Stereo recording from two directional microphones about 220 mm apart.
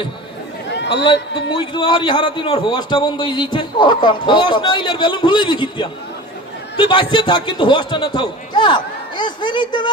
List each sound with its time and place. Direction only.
0.7 s chatter: 50° left (ahead or behind)
1.6 s a man's voice: 20° left (ahead or behind)